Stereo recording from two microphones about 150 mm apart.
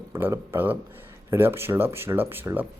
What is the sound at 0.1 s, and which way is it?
Speech, 15° right (ahead or behind).